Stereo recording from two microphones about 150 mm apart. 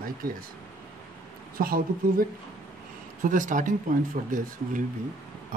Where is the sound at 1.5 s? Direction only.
75° right (ahead or behind).